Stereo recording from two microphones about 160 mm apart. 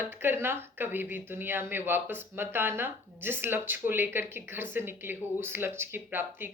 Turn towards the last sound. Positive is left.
turn(degrees=-15)  # may be behind; listen again after turning